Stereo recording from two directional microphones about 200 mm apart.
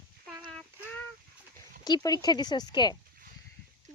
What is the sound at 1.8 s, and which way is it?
Speech, 20° left (ahead or behind).